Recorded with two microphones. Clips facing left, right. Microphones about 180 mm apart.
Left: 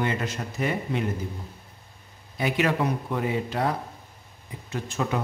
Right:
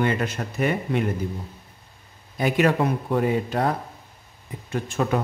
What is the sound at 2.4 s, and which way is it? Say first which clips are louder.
Speech: right 4 dB; 45° right (ahead or behind).